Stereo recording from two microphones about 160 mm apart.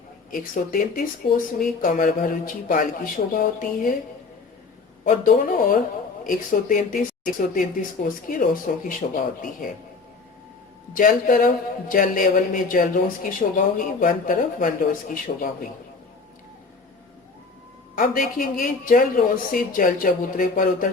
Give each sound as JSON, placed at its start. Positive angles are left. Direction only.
{"t": 0.3, "sound": "speech", "side_deg": 60}
{"t": 5.0, "sound": "speech", "side_deg": 60}
{"t": 10.9, "sound": "speech", "side_deg": 60}
{"t": 17.9, "sound": "speech", "side_deg": 60}